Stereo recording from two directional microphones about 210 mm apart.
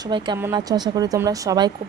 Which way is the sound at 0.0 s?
20° right (ahead or behind).